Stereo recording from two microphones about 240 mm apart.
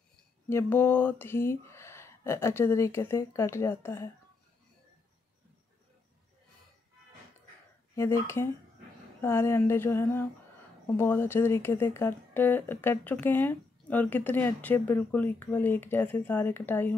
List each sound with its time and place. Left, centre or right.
0.5 s speech: centre
7.9 s speech: centre